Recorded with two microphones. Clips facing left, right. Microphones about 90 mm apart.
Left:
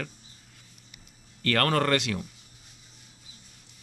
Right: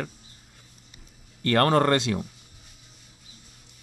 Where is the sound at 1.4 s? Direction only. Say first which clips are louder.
Right 4 dB; 25° right (ahead or behind).